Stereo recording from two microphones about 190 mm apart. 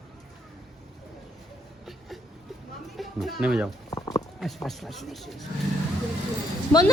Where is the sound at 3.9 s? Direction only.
20° left (ahead or behind).